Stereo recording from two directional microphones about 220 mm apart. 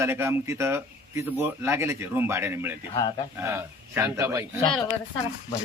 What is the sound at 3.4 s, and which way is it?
A man's voice, 10° right (ahead or behind).